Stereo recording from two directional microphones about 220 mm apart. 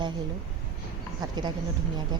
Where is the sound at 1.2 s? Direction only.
20° right (ahead or behind).